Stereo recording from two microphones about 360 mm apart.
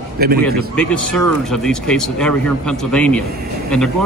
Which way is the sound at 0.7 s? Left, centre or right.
Centre.